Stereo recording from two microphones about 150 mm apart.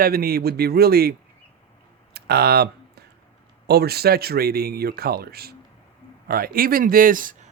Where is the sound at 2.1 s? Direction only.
90° right.